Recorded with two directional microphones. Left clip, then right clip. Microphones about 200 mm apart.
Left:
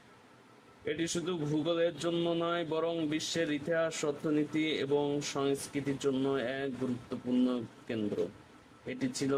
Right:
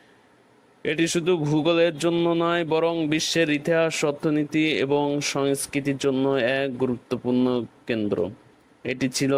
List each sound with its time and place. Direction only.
0.9 s speech: 40° right (ahead or behind)